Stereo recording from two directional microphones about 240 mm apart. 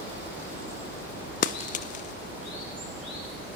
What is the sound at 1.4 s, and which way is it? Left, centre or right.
Bird flight, left.